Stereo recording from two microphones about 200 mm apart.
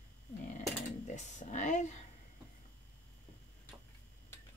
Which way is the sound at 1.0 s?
35° left (ahead or behind).